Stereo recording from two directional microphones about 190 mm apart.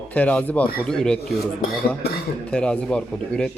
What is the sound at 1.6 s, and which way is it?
Speech, 55° left (ahead or behind).